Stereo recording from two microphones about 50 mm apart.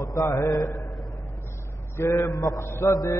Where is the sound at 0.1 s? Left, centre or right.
Left.